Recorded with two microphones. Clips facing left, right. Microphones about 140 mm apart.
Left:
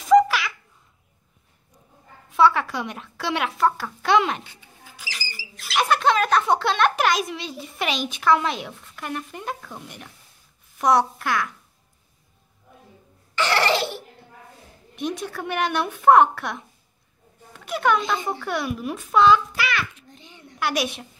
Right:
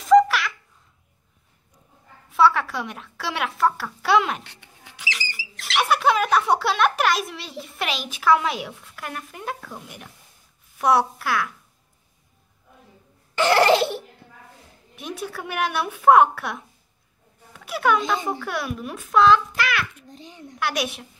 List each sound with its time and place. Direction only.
0.1 s babbling: centre (ahead or behind)
2.3 s speech: centre (ahead or behind)
4.5 s music: 70° right (ahead or behind)
5.8 s a child's voice: 5° right (ahead or behind)
13.3 s laughter: 50° right (ahead or behind)
15.0 s speech: 5° right (ahead or behind)
20.1 s a child's voice: 40° right (ahead or behind)
20.5 s speech: centre (ahead or behind)